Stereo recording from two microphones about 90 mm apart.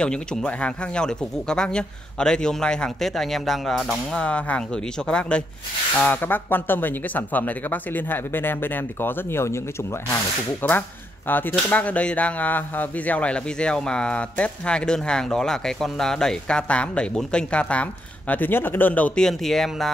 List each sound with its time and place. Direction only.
0.0 s speech: 10° left (ahead or behind); by 9.6 s 30° left (ahead or behind)
10.6 s speech: 20° left (ahead or behind)
19.2 s speech: 5° left (ahead or behind)